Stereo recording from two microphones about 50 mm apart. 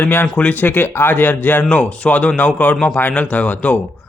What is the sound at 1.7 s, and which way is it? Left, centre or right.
Speech, left.